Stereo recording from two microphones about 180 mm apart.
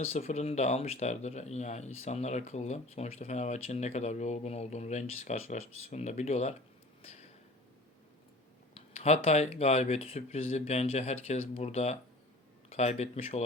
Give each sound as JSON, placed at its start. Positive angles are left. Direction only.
{"t": 0.0, "sound": "speech", "side_deg": 40}
{"t": 7.0, "sound": "a sound", "side_deg": 35}
{"t": 8.7, "sound": "speech", "side_deg": 35}